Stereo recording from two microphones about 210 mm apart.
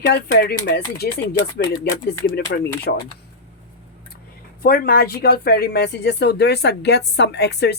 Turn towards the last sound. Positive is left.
turn(degrees=55)  # may be behind; listen again after turning